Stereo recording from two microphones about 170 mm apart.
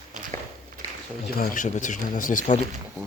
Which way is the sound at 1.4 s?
50° left (ahead or behind).